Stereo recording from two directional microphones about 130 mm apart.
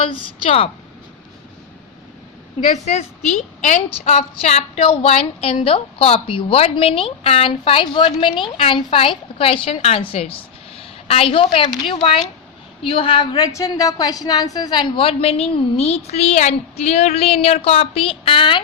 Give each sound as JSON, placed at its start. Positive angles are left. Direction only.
{"t": 0.1, "sound": "a woman's voice", "side_deg": 50}
{"t": 2.7, "sound": "a woman's voice", "side_deg": 60}
{"t": 4.0, "sound": "a woman's voice", "side_deg": 55}
{"t": 13.3, "sound": "a woman's voice", "side_deg": 25}